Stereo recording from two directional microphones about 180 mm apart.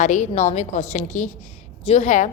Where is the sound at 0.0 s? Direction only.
45° left (ahead or behind).